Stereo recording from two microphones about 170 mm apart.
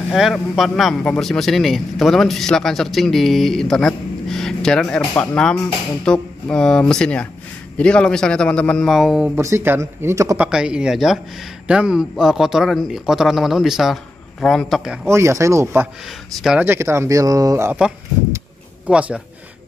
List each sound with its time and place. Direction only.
0.1 s a man's voice: centre (ahead or behind)
9.3 s a man's voice: 15° right (ahead or behind); by 15.0 s centre (ahead or behind)
15.0 s speech: 15° right (ahead or behind)
18.9 s speech: 5° right (ahead or behind)